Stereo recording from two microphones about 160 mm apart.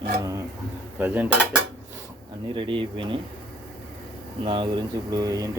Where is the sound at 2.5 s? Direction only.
30° right (ahead or behind).